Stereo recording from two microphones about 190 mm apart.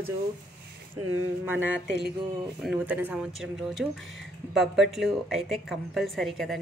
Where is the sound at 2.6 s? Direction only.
5° right (ahead or behind).